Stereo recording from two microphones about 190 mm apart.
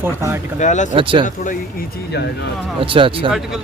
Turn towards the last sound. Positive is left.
turn(degrees=-25)  # may be behind; listen again after turning